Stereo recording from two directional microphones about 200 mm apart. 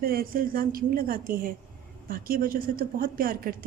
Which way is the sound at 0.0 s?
45° right (ahead or behind).